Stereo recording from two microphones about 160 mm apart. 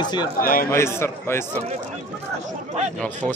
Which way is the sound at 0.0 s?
25° left (ahead or behind).